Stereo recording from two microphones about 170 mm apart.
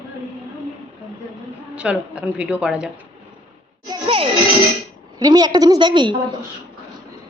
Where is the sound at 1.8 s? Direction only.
5° right (ahead or behind).